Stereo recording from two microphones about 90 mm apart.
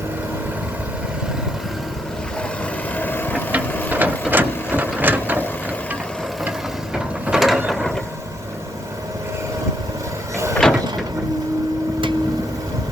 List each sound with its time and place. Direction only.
2.9 s vehicle: 20° left (ahead or behind)
3.8 s printer: 20° right (ahead or behind)
6.9 s ratchet: 5° right (ahead or behind)
7.7 s mechanisms: 5° left (ahead or behind)
10.6 s vehicle: 5° left (ahead or behind)